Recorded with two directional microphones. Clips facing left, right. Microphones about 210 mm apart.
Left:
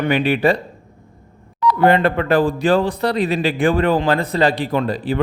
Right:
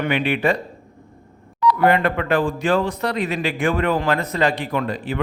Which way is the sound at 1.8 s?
30° left (ahead or behind).